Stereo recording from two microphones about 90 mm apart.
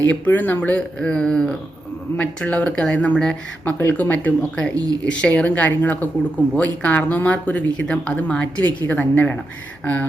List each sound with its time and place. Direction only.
0.1 s speech: 20° left (ahead or behind)
3.6 s speech: 20° left (ahead or behind)